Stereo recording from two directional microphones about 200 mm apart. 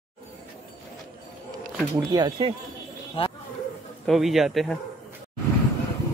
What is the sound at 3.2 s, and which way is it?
Speech, 30° left (ahead or behind).